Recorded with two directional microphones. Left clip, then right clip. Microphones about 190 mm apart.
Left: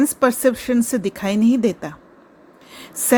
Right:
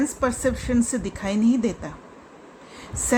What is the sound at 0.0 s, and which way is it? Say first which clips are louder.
A woman's voice: left 7 dB; 40° left (ahead or behind).